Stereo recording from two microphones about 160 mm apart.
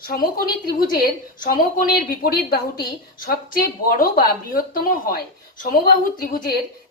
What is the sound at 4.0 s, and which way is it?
Speech, 65° left (ahead or behind).